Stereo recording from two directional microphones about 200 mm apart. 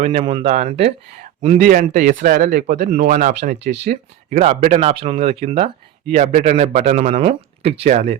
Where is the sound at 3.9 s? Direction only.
35° right (ahead or behind).